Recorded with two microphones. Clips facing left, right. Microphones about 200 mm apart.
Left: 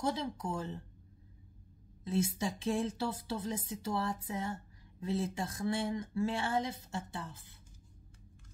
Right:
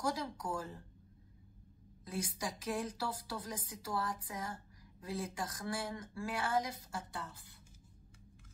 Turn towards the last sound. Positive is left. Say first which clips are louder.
# left 2 dB
turn(degrees=25)  # may be behind; listen again after turning